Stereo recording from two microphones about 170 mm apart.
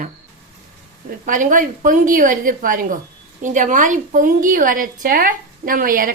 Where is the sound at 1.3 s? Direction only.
50° right (ahead or behind).